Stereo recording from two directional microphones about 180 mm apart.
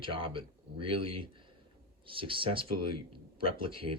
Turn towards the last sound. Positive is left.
turn(degrees=-30)  # may be behind; listen again after turning